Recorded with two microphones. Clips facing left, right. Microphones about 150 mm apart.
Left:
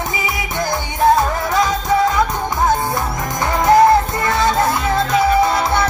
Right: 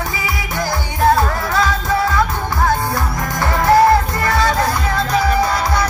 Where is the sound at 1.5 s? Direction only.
20° left (ahead or behind).